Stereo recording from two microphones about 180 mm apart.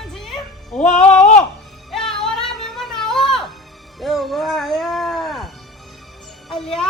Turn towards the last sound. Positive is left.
turn(degrees=0)  # may be behind; listen again after turning